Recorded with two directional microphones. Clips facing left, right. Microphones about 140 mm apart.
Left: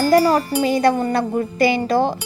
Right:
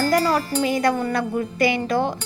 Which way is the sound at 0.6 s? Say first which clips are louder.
Left 4 dB; 30° left (ahead or behind).